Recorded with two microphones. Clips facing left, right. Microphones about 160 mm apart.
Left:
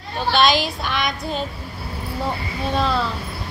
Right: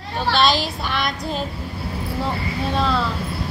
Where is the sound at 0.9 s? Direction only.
Centre (ahead or behind).